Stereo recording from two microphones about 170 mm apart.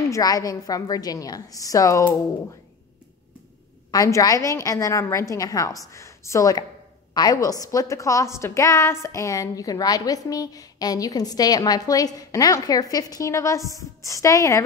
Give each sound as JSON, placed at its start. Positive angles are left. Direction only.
{"t": 0.1, "sound": "a woman's voice", "side_deg": 20}
{"t": 3.9, "sound": "a woman's voice", "side_deg": 20}